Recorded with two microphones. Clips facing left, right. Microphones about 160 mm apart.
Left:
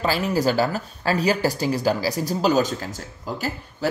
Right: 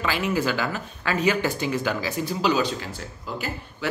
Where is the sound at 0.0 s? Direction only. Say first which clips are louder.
Left 3 dB; 35° left (ahead or behind).